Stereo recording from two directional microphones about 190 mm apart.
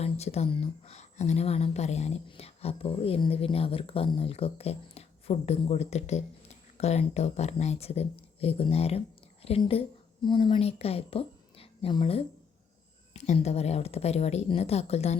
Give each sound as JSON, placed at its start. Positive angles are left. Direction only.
{"t": 0.0, "sound": "a woman's voice", "side_deg": 35}